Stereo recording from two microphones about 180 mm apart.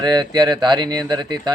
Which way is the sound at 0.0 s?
25° right (ahead or behind).